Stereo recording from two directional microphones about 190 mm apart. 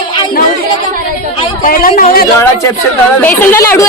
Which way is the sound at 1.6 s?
45° left (ahead or behind).